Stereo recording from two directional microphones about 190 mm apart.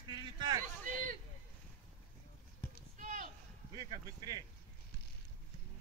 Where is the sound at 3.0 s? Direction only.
40° right (ahead or behind).